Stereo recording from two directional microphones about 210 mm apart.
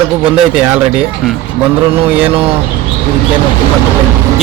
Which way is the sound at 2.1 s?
5° right (ahead or behind).